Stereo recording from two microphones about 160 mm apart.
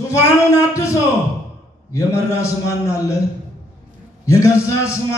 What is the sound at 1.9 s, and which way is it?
Speech, 20° left (ahead or behind).